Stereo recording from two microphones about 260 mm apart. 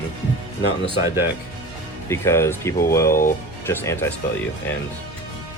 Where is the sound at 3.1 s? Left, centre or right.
Left.